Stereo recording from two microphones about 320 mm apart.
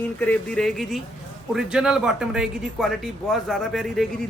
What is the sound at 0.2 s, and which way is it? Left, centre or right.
A man's voice, centre.